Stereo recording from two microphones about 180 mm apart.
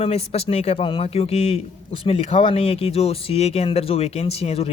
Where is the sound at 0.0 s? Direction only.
35° left (ahead or behind).